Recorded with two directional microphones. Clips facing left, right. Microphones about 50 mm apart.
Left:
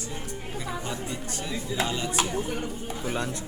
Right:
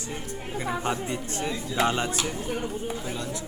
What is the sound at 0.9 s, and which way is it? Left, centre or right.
Speech, right.